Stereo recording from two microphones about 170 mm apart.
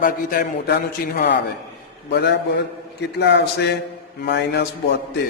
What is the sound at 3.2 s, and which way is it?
Speech, 90° left.